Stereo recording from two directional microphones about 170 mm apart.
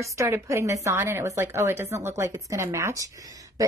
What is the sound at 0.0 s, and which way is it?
A woman's voice, 20° right (ahead or behind).